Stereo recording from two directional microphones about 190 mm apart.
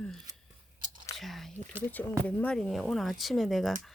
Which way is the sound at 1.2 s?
Centre (ahead or behind).